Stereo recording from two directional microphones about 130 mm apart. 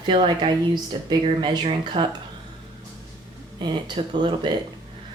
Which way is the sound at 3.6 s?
35° right (ahead or behind).